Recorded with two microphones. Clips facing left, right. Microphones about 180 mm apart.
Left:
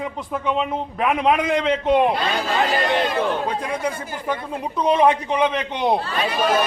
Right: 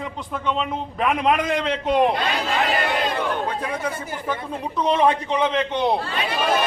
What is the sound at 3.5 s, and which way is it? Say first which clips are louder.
Speech: left 2 dB; 15° left (ahead or behind).